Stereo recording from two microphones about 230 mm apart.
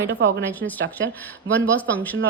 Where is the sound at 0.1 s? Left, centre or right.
Right.